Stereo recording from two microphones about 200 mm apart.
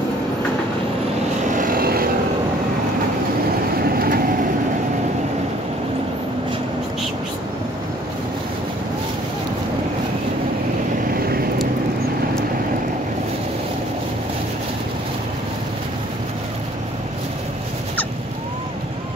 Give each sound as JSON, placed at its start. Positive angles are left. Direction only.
{"t": 1.5, "sound": "vehicle", "side_deg": -40}
{"t": 3.9, "sound": "vehicle", "side_deg": -50}
{"t": 11.1, "sound": "vehicle", "side_deg": -50}